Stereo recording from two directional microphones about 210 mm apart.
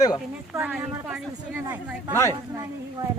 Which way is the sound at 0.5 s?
10° right (ahead or behind).